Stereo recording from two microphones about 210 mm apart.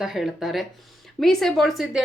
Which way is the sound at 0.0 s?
Centre (ahead or behind).